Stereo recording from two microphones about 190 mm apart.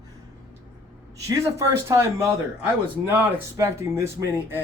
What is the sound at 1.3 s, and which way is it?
Speech, 15° right (ahead or behind).